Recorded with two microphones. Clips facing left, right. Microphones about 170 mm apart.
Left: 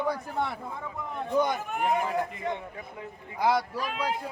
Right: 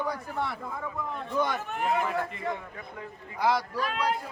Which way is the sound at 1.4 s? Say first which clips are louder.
Left 2 dB; 15° left (ahead or behind).